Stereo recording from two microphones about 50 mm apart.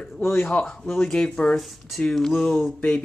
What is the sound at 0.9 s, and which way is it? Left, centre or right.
Speech, centre.